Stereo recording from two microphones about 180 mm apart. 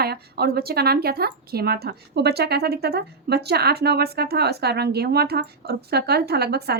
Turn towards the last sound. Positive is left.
turn(degrees=-65)  # may be behind; listen again after turning